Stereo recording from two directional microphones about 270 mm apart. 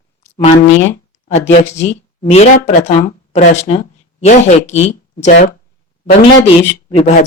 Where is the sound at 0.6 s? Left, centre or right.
Left.